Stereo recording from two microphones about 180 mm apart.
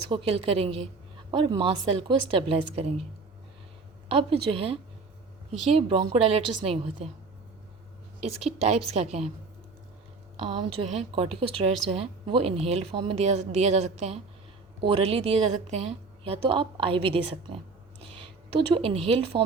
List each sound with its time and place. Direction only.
0.1 s a woman's voice: 30° right (ahead or behind)
4.1 s a woman's voice: 30° right (ahead or behind)
8.2 s a woman's voice: 35° right (ahead or behind)
10.3 s a woman's voice: 30° right (ahead or behind)
18.7 s a woman's voice: 30° right (ahead or behind)